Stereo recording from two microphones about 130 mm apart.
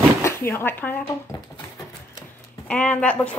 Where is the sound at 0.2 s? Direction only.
20° left (ahead or behind).